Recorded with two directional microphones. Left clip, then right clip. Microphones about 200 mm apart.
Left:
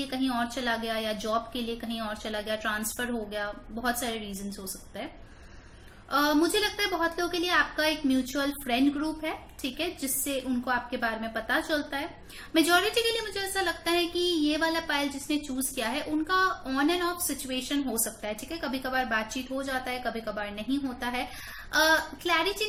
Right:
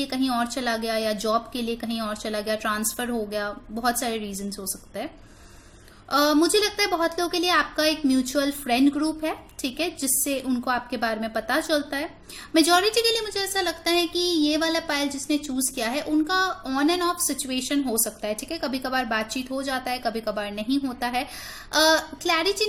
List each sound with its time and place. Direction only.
0.1 s a woman's voice: 50° right (ahead or behind)
6.1 s a woman's voice: 50° right (ahead or behind)